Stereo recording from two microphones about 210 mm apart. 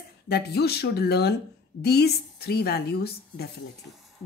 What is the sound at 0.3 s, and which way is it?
Speech, 50° left (ahead or behind).